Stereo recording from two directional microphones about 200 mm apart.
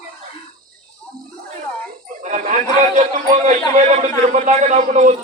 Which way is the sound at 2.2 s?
35° right (ahead or behind).